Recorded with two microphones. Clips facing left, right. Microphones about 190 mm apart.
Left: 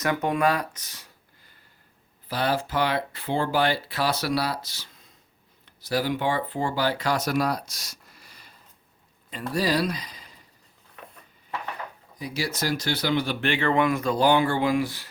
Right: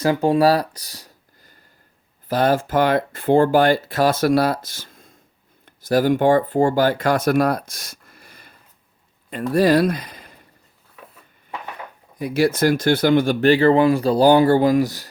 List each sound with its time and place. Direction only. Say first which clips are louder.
0.0 s speech: right 7 dB; 30° right (ahead or behind); by 10.4 s 55° right (ahead or behind)
12.2 s speech: right 12 dB; 55° right (ahead or behind); by 15.0 s 40° right (ahead or behind)